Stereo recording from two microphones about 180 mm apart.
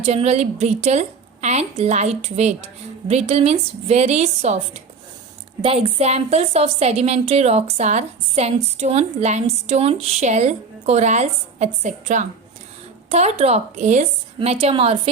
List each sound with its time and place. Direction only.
0.0 s a woman's voice: 35° right (ahead or behind)